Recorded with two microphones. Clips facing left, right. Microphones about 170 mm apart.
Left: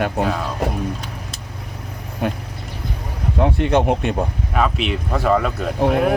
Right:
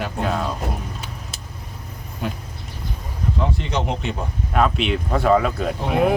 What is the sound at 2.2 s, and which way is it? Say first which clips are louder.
Speech: left 5 dB; 65° left (ahead or behind).